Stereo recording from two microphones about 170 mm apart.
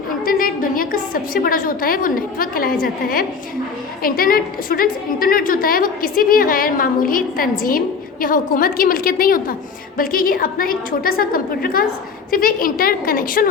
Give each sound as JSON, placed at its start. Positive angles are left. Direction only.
{"t": 0.3, "sound": "a woman's voice", "side_deg": 55}